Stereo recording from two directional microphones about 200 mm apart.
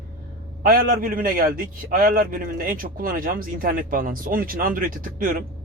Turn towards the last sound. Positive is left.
turn(degrees=-45)  # may be behind; listen again after turning